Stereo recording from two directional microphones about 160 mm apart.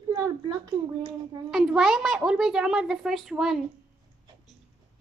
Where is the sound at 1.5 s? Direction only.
5° right (ahead or behind).